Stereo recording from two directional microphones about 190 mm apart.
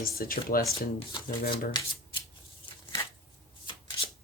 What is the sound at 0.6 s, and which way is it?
Speech, 15° left (ahead or behind).